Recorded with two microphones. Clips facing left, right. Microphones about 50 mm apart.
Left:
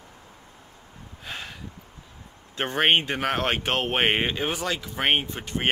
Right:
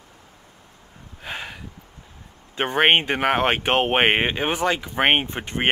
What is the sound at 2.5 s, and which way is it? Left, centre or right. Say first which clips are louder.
A man's voice: right 4 dB; centre.